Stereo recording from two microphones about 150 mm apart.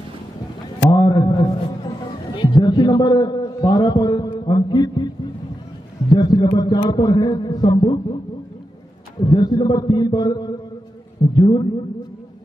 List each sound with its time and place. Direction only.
0.8 s a sound: 25° left (ahead or behind)
2.3 s a man's voice: 30° left (ahead or behind)
9.2 s speech: 30° left (ahead or behind)